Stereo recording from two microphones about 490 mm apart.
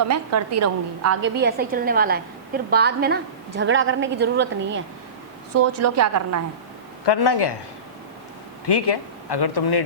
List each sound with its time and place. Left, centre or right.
0.1 s a woman's voice: right
5.7 s a woman's voice: right
7.0 s speech: left
8.6 s speech: left